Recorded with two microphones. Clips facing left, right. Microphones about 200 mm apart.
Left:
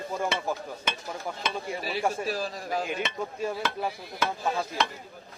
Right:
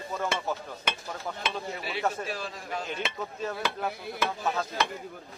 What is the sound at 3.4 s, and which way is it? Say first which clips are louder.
Speech: left 1 dB; 10° left (ahead or behind).